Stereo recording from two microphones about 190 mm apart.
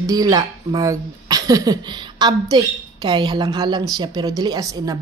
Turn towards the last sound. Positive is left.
turn(degrees=-20)  # may be behind; listen again after turning